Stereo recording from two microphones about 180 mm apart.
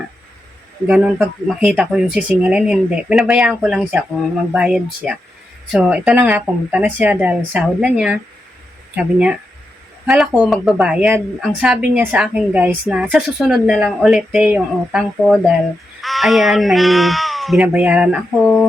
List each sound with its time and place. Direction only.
0.9 s a woman's voice: 5° right (ahead or behind)